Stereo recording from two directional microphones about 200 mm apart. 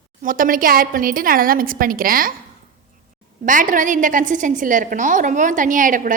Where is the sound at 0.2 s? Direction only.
45° right (ahead or behind).